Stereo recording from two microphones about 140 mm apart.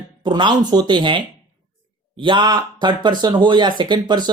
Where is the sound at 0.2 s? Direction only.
35° right (ahead or behind).